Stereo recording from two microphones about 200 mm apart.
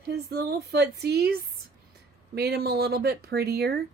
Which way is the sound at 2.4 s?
50° right (ahead or behind).